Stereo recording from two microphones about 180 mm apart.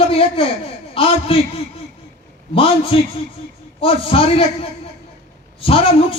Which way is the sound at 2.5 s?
30° left (ahead or behind).